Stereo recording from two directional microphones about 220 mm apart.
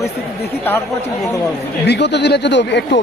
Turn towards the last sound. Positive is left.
turn(degrees=50)  # may be behind; listen again after turning